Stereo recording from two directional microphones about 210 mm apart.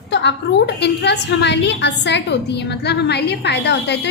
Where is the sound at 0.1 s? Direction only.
55° left (ahead or behind).